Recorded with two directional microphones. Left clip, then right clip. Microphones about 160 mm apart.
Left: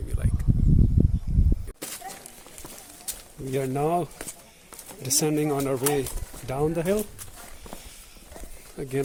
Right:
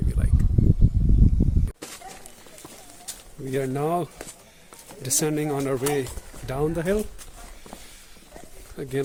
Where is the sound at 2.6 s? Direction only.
60° left (ahead or behind).